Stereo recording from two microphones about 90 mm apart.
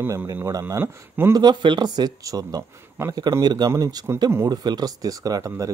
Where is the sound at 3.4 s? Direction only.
55° right (ahead or behind).